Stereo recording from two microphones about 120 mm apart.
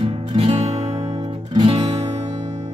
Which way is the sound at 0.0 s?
50° right (ahead or behind).